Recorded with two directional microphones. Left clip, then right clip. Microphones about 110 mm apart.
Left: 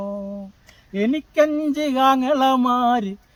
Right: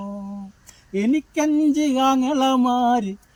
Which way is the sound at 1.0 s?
15° left (ahead or behind).